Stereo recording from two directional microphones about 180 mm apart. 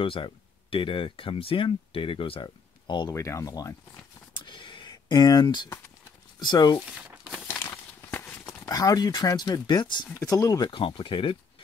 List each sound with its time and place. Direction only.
0.0 s speech: 30° left (ahead or behind)
4.5 s a sound: 25° left (ahead or behind)
6.4 s speech: 25° left (ahead or behind)
7.0 s crumpling: 5° right (ahead or behind)
7.4 s a sound: 15° left (ahead or behind)
10.2 s speech: 20° left (ahead or behind)